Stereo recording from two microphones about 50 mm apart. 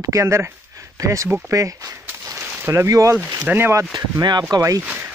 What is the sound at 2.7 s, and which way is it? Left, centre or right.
Speech, right.